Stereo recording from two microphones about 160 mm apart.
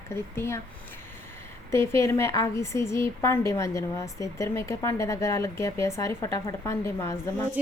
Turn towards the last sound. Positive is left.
turn(degrees=20)  # may be behind; listen again after turning